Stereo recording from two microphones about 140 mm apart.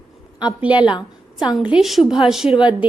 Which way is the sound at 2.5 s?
35° left (ahead or behind).